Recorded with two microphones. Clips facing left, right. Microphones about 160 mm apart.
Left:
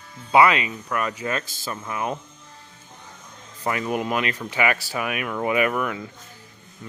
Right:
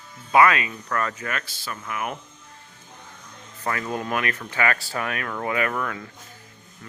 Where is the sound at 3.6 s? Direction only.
15° left (ahead or behind).